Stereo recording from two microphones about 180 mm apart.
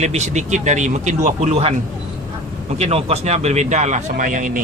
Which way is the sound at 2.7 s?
35° right (ahead or behind).